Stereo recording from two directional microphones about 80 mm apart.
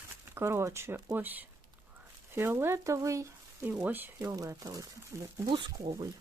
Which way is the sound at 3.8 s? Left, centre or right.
Right.